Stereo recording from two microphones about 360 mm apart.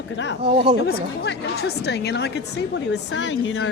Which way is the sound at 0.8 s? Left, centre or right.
Left.